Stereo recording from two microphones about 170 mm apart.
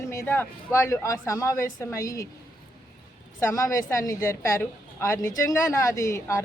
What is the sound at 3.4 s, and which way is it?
A woman's voice, 20° left (ahead or behind).